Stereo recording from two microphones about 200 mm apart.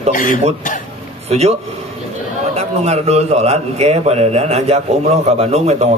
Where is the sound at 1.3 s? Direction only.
30° right (ahead or behind).